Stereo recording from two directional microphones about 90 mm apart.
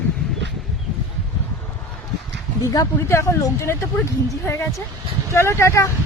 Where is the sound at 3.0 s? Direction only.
30° left (ahead or behind).